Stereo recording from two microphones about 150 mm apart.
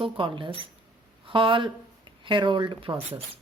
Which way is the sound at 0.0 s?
35° right (ahead or behind).